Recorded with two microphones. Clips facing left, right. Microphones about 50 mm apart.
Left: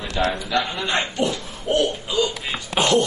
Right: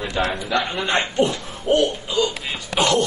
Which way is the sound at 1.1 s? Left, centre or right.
Right.